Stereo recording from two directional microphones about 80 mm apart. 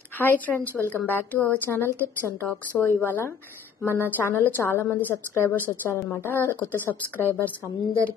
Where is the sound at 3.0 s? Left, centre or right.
Left.